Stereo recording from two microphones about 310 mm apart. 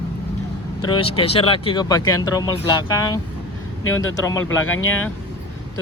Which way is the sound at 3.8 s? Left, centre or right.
Left.